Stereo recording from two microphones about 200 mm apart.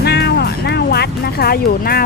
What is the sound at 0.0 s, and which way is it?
Music, 55° left (ahead or behind).